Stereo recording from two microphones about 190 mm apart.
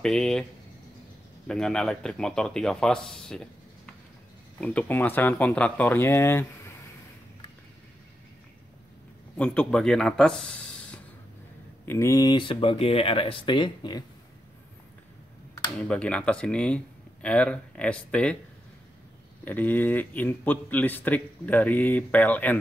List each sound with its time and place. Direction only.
0.0 s speech: 5° left (ahead or behind)
1.5 s a man's voice: 5° left (ahead or behind)
9.4 s speech: 5° left (ahead or behind); by 14.0 s 25° left (ahead or behind)
15.6 s speech: 5° left (ahead or behind)
19.4 s a man's voice: 10° left (ahead or behind)